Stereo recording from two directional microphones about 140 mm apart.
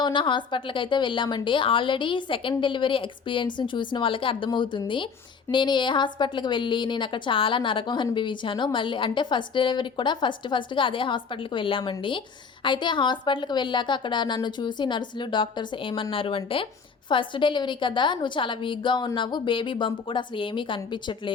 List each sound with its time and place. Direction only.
0.0 s a woman's voice: 35° left (ahead or behind)